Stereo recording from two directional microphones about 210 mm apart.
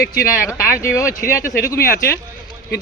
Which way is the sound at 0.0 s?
45° left (ahead or behind).